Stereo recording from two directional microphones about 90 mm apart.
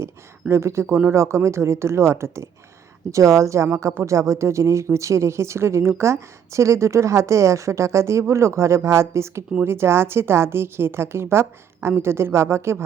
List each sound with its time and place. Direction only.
0.0 s a woman's voice: 30° right (ahead or behind)